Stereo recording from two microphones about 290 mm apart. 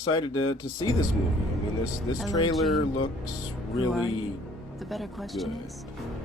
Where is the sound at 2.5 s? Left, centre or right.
Centre.